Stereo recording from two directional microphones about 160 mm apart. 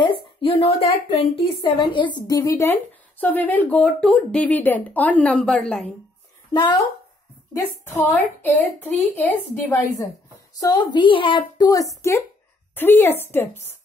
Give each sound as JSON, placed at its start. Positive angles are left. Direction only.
{"t": 0.0, "sound": "a woman's voice", "side_deg": 35}
{"t": 6.5, "sound": "a child's voice", "side_deg": 30}
{"t": 7.5, "sound": "speech", "side_deg": 15}
{"t": 10.6, "sound": "a child's voice", "side_deg": 25}